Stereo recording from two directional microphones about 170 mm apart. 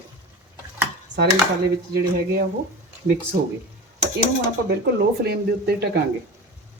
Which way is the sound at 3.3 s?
70° right (ahead or behind).